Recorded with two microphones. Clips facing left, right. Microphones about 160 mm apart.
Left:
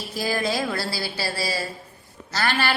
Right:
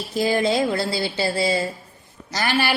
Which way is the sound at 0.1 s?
20° right (ahead or behind).